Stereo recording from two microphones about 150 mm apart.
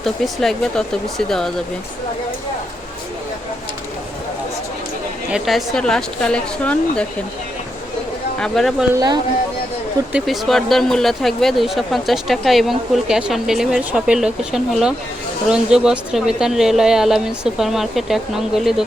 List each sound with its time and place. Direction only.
0.0 s speech: centre (ahead or behind)
5.3 s speech: centre (ahead or behind)
8.4 s speech: centre (ahead or behind)
8.9 s speech: 20° right (ahead or behind)
10.1 s speech: 5° right (ahead or behind)